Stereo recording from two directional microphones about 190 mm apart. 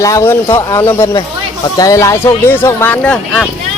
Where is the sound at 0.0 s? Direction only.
15° left (ahead or behind).